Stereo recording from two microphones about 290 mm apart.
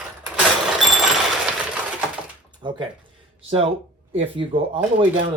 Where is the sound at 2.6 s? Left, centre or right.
Centre.